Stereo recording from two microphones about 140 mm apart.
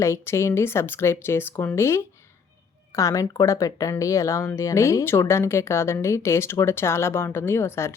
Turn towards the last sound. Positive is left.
turn(degrees=20)  # may be behind; listen again after turning